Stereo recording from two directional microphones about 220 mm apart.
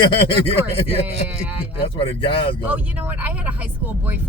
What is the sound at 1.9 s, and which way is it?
Speech, 25° left (ahead or behind).